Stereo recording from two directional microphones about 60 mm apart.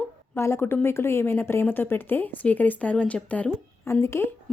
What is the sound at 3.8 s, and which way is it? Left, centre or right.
Speech, left.